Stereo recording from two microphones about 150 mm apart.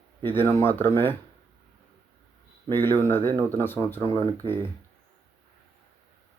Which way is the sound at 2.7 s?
15° left (ahead or behind).